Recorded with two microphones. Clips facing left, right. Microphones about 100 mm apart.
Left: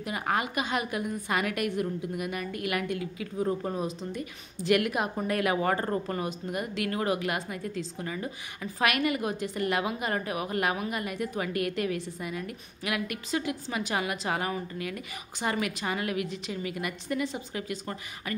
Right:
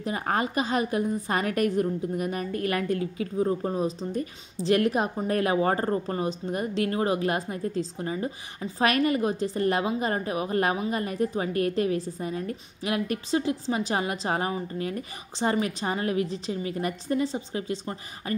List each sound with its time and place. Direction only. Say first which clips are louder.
0.0 s a woman's voice: right 3 dB; 35° right (ahead or behind)